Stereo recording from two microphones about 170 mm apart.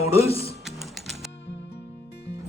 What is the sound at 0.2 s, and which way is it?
Speech, 35° left (ahead or behind).